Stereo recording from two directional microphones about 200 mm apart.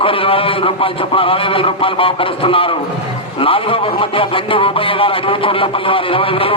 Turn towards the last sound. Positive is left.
turn(degrees=25)  # may be behind; listen again after turning